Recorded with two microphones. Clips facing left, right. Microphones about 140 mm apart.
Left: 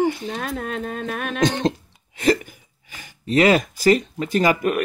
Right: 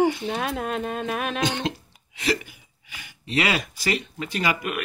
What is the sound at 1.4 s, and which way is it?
Cough, 40° left (ahead or behind).